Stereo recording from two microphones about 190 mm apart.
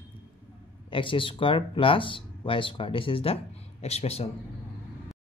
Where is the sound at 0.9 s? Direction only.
25° left (ahead or behind).